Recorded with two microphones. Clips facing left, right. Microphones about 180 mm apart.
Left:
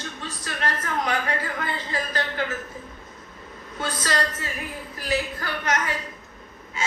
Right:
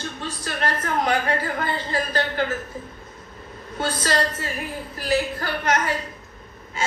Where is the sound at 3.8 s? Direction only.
30° right (ahead or behind).